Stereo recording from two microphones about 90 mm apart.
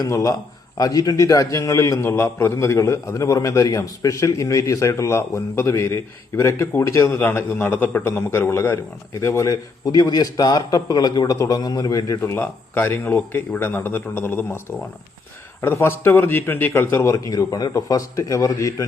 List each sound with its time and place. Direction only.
0.0 s a man's voice: 40° left (ahead or behind)
7.1 s a man's voice: 20° left (ahead or behind); by 12.3 s 40° left (ahead or behind)
12.3 s a man's voice: 25° left (ahead or behind)
15.6 s a man's voice: 25° left (ahead or behind)